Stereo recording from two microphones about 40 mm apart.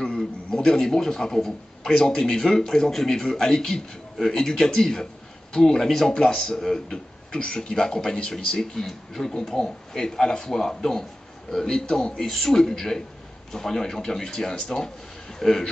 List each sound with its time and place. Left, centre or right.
0.0 s a man's voice: centre